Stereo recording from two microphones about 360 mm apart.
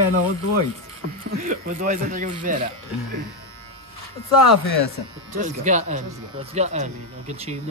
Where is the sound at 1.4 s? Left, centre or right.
Right.